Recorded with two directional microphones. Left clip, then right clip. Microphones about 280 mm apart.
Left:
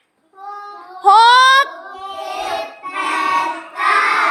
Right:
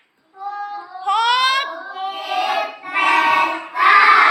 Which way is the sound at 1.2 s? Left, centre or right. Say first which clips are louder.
Left 6 dB; left.